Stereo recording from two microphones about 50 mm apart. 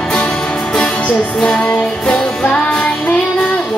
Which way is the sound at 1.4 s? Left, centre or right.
Centre.